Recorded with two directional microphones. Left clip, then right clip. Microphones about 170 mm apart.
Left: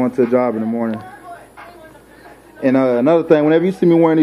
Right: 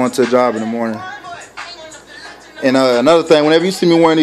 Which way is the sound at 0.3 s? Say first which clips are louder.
Right 3 dB; 15° right (ahead or behind).